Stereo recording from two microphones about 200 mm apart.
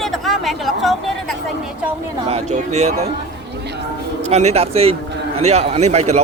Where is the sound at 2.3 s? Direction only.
35° right (ahead or behind).